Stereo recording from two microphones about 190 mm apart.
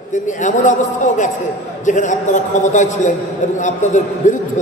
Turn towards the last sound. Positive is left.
turn(degrees=40)  # may be behind; listen again after turning